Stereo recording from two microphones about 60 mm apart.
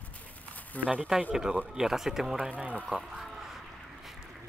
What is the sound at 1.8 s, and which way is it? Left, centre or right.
Speech, centre.